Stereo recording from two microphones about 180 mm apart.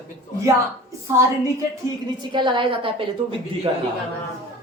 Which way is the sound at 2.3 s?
25° right (ahead or behind).